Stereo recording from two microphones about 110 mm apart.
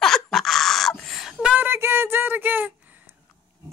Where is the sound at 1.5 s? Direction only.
20° right (ahead or behind).